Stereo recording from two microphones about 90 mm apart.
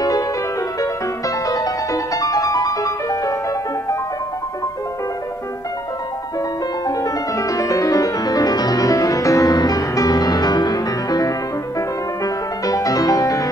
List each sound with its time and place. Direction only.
1.4 s music: 40° left (ahead or behind)
6.9 s music: 40° left (ahead or behind)
12.6 s music: 40° left (ahead or behind)